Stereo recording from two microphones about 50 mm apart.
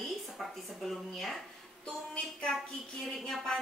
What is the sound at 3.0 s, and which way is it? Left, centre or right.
Speech, centre.